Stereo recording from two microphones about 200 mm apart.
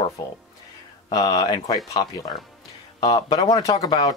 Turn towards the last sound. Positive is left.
turn(degrees=20)  # may be behind; listen again after turning